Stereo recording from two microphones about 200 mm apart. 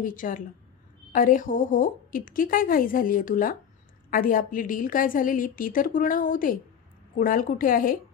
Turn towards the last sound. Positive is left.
turn(degrees=45)  # may be behind; listen again after turning